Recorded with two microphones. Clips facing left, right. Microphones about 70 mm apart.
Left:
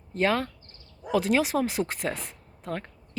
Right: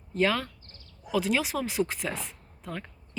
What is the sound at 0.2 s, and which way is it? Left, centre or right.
Speech, left.